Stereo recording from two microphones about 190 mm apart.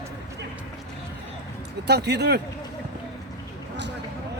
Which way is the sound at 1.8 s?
60° right (ahead or behind).